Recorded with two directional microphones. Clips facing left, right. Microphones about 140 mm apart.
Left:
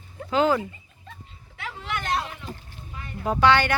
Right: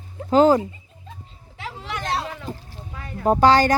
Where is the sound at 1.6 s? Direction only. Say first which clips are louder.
Right 1 dB; 30° right (ahead or behind).